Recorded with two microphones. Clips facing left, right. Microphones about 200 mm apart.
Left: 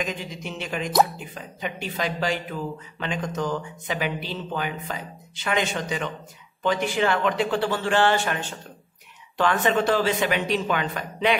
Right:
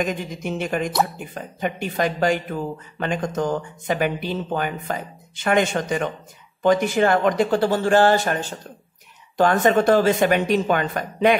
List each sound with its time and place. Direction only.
0.0 s speech: 50° right (ahead or behind)